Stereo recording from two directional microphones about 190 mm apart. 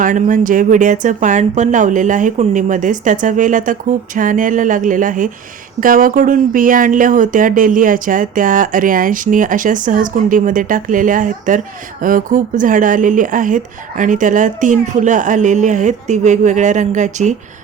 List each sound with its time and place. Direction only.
0.0 s speech: 45° right (ahead or behind)